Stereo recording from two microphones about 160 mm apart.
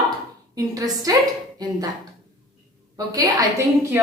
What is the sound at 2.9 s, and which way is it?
Speech, 20° right (ahead or behind).